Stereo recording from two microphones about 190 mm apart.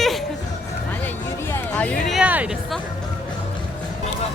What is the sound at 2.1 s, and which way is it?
Speech, 5° right (ahead or behind).